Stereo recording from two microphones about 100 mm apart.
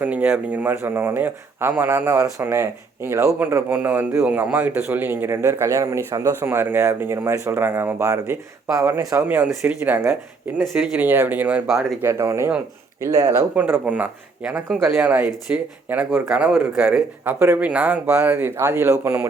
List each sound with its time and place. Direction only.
0.0 s a man's voice: 15° right (ahead or behind)
3.3 s a man's voice: 20° right (ahead or behind)
9.2 s speech: 15° right (ahead or behind)
12.0 s a man's voice: 30° right (ahead or behind)
13.6 s speech: 10° right (ahead or behind)
14.8 s a man's voice: 25° right (ahead or behind)